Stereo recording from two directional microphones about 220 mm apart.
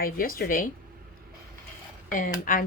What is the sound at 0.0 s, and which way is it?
Speech, 40° left (ahead or behind).